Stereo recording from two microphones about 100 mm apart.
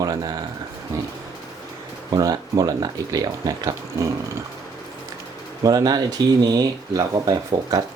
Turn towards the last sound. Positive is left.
turn(degrees=-40)  # may be behind; listen again after turning